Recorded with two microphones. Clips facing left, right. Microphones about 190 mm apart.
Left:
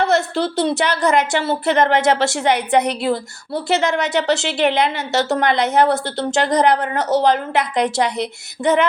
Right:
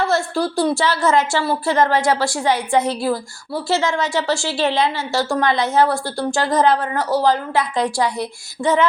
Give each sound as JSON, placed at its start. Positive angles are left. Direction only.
{"t": 0.0, "sound": "a woman's voice", "side_deg": 20}